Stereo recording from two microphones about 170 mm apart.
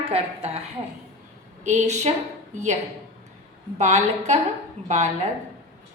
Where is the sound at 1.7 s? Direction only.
40° right (ahead or behind).